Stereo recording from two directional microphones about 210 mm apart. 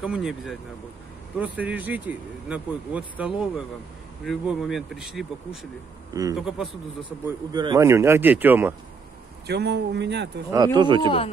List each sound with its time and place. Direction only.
0.0 s speech: 5° right (ahead or behind)
7.2 s speech: 20° right (ahead or behind)
9.5 s speech: 55° right (ahead or behind)
10.5 s speech: 20° right (ahead or behind)